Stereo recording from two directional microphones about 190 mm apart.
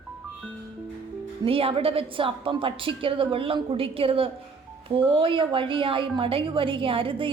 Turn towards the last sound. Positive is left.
turn(degrees=-30)  # may be behind; listen again after turning